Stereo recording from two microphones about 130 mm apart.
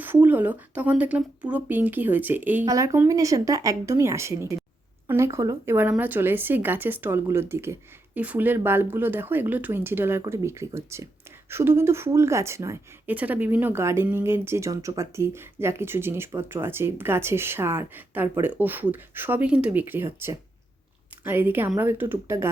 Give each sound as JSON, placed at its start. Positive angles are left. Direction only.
{"t": 0.0, "sound": "a woman's voice", "side_deg": -15}
{"t": 2.6, "sound": "speech", "side_deg": -25}
{"t": 5.7, "sound": "a woman's voice", "side_deg": -15}